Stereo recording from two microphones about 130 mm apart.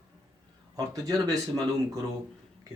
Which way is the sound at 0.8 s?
25° right (ahead or behind).